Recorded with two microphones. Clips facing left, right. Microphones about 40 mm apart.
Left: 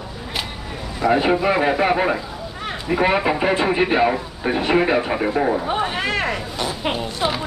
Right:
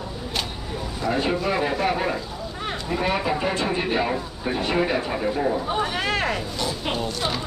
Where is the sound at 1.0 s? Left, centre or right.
Left.